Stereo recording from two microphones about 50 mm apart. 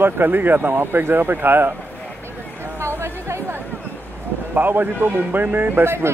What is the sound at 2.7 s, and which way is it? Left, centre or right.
Chatter, right.